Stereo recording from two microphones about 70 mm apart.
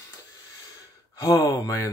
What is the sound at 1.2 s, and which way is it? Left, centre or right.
Speech, left.